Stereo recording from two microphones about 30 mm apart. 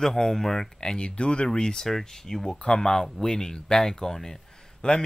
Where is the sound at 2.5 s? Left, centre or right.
Left.